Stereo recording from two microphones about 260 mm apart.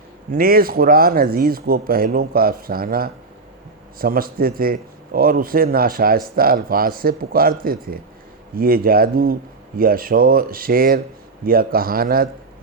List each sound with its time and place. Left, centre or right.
0.3 s a man's voice: right